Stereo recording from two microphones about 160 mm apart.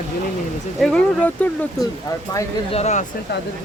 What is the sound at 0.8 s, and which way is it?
Speech, 5° left (ahead or behind).